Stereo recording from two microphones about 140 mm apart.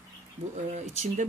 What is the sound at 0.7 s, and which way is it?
Speech, 55° right (ahead or behind).